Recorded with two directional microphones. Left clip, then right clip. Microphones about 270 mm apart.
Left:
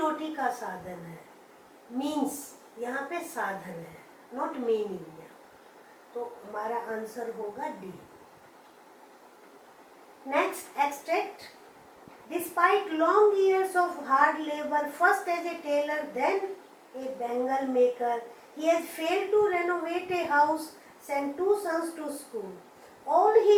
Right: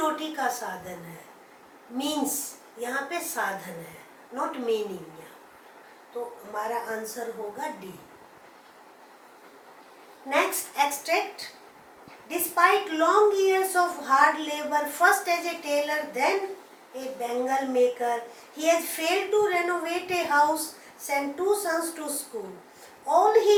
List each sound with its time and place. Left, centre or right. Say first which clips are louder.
0.0 s a woman's voice: right 2 dB; centre
2.0 s speech: right 2 dB; left
2.8 s a woman's voice: right 3 dB; centre
6.1 s a woman's voice: right 3 dB; centre
10.2 s a woman's voice: right 3 dB; centre
12.3 s a woman's voice: right 3 dB; centre